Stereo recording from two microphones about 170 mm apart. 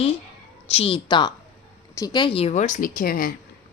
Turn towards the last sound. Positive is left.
turn(degrees=60)  # may be behind; listen again after turning